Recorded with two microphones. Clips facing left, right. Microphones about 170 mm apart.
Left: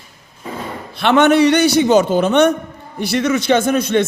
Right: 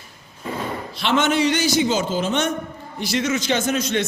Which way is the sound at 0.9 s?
60° left (ahead or behind).